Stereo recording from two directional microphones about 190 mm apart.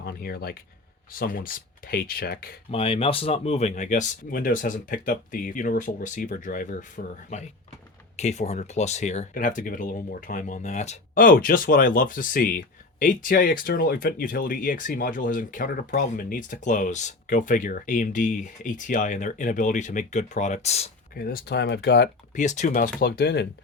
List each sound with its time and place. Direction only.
0.0 s speech: 55° left (ahead or behind)
2.6 s speech: 30° left (ahead or behind)
21.2 s speech: 50° left (ahead or behind)
22.4 s speech: 40° left (ahead or behind); by 23.5 s 60° left (ahead or behind)